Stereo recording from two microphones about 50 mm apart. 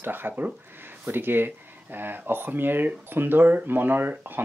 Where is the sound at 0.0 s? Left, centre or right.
Right.